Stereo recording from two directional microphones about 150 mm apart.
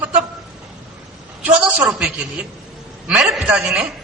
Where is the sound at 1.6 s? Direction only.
5° right (ahead or behind).